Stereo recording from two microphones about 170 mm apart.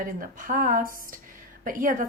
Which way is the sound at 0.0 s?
55° right (ahead or behind).